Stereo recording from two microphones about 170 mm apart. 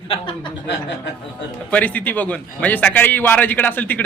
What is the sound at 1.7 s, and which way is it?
A man's voice, 10° left (ahead or behind).